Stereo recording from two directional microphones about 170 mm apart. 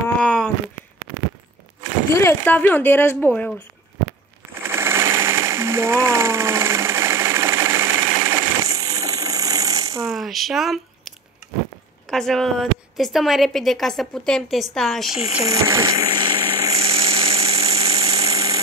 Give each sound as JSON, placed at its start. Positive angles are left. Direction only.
{"t": 0.2, "sound": "a sound", "side_deg": 5}
{"t": 2.1, "sound": "speech", "side_deg": 10}
{"t": 4.6, "sound": "sewing machine", "side_deg": -15}
{"t": 8.3, "sound": "jackhammer", "side_deg": -20}
{"t": 10.0, "sound": "a woman's voice", "side_deg": 0}
{"t": 12.1, "sound": "a woman's voice", "side_deg": 0}
{"t": 15.4, "sound": "engine", "side_deg": -20}
{"t": 17.9, "sound": "engine", "side_deg": -20}